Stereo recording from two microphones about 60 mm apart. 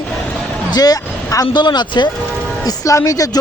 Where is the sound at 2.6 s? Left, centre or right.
Left.